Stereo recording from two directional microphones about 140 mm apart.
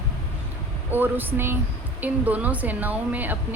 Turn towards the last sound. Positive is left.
turn(degrees=-10)  # may be behind; listen again after turning